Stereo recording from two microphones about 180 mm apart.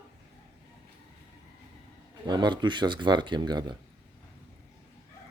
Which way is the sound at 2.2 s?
25° right (ahead or behind).